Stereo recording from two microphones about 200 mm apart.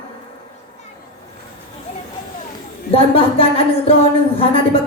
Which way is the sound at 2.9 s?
30° left (ahead or behind).